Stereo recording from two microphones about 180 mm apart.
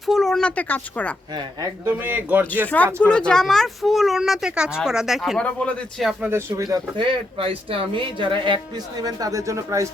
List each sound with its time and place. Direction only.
0.0 s a sound: centre (ahead or behind)
1.4 s a man's voice: 15° right (ahead or behind)
2.6 s speech: 10° left (ahead or behind)
6.3 s speech: 15° right (ahead or behind)